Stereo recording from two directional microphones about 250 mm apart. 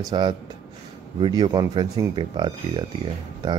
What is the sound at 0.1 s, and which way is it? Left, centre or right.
Speech, centre.